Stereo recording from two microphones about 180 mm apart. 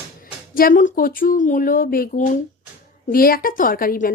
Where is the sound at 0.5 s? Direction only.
50° left (ahead or behind).